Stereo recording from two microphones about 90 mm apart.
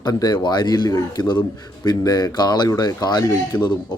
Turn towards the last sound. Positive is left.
turn(degrees=15)  # may be behind; listen again after turning